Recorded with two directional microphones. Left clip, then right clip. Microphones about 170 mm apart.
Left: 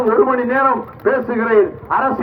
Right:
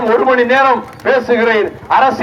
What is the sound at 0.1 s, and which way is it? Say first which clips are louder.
A man's voice: right 6 dB; 35° right (ahead or behind).